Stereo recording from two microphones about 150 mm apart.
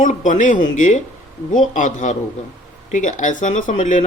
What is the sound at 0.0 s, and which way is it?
Speech, 55° left (ahead or behind).